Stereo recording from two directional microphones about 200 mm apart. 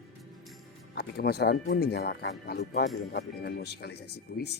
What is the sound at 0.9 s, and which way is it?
A man's voice, 50° left (ahead or behind).